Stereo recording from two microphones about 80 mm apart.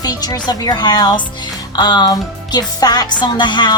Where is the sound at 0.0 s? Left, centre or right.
Left.